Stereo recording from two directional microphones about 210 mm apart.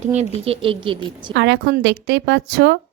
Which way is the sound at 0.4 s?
25° right (ahead or behind).